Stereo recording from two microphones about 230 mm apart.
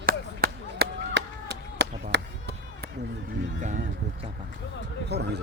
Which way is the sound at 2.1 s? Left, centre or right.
Right.